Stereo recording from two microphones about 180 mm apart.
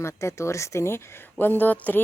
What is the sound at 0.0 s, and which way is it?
Speech, 15° left (ahead or behind).